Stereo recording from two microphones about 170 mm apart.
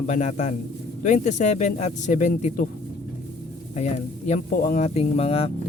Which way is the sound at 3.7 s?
45° left (ahead or behind).